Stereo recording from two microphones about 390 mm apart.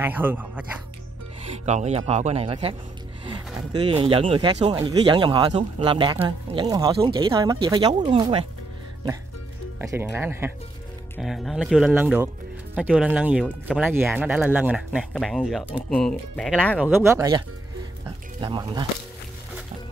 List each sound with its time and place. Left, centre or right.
0.0 s speech: centre
1.7 s speech: centre
9.8 s speech: centre